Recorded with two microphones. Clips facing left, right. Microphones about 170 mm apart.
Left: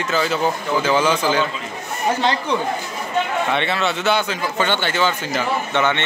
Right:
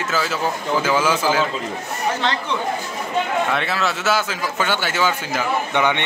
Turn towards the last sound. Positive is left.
turn(degrees=-15)  # may be behind; listen again after turning